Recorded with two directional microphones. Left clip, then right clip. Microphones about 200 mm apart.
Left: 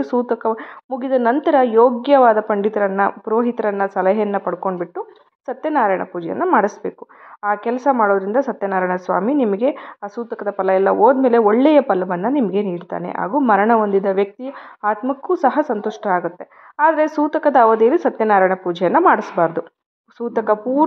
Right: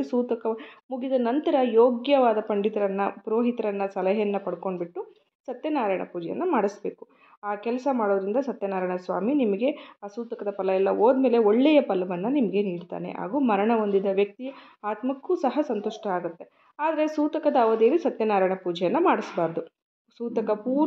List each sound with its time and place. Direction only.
0.0 s speech: 25° left (ahead or behind)